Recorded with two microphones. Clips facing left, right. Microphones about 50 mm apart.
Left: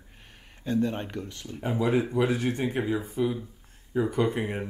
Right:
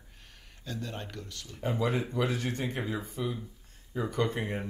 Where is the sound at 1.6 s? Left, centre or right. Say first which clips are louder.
Left 5 dB; centre.